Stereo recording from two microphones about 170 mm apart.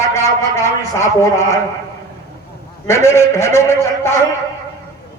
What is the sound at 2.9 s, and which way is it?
A man's voice, 15° left (ahead or behind).